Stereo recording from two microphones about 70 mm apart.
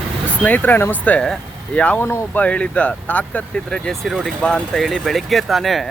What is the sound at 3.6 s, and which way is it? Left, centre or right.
Speech, centre.